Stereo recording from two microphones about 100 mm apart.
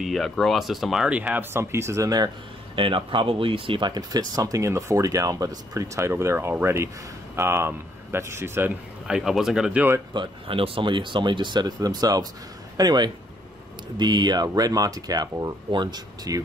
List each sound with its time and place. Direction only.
0.0 s speech: centre (ahead or behind); by 2.3 s 40° right (ahead or behind)
2.7 s speech: 60° right (ahead or behind)
3.9 s speech: 40° right (ahead or behind); by 8.7 s 25° right (ahead or behind)
9.0 s speech: 5° right (ahead or behind)
9.8 s speech: 25° right (ahead or behind)
10.1 s speech: 55° right (ahead or behind)